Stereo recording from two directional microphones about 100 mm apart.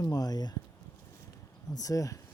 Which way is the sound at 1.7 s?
35° left (ahead or behind).